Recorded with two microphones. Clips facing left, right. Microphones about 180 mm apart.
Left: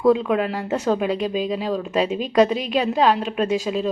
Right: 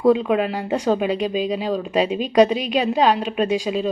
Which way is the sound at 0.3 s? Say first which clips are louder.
Right 1 dB; 10° right (ahead or behind).